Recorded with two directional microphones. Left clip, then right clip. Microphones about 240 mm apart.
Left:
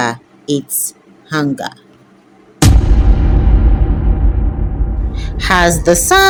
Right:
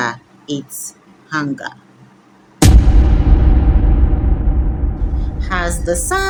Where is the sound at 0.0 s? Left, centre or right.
Left.